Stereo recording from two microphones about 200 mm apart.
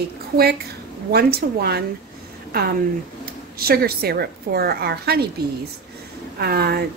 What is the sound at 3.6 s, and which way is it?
A woman's voice, 50° right (ahead or behind).